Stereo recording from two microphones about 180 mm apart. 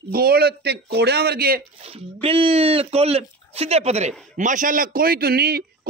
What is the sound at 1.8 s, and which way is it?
A man's voice, 30° right (ahead or behind).